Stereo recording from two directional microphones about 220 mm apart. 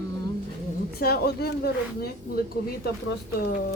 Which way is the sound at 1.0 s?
45° left (ahead or behind).